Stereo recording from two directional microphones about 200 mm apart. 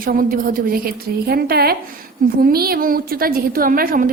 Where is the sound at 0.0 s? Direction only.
45° right (ahead or behind).